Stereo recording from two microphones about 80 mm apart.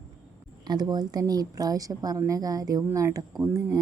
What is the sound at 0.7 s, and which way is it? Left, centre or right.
A woman's voice, right.